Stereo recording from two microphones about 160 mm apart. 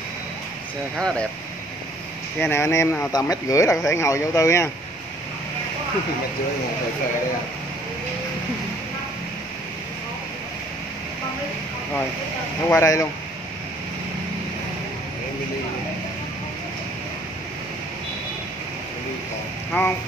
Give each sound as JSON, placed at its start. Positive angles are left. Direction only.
{"t": 0.9, "sound": "speech", "side_deg": 5}
{"t": 2.4, "sound": "speech", "side_deg": 15}
{"t": 12.6, "sound": "speech", "side_deg": 20}
{"t": 19.7, "sound": "speech", "side_deg": 10}